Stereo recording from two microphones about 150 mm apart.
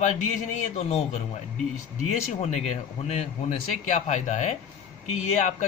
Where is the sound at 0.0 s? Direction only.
55° left (ahead or behind).